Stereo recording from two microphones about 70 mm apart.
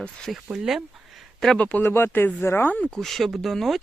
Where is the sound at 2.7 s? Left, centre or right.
Centre.